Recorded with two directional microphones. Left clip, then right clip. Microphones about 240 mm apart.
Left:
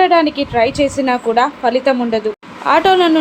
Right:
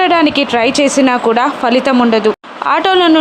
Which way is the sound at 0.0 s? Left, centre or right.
Centre.